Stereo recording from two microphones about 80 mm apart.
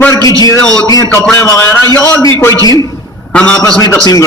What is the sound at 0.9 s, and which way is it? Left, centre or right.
Speech, left.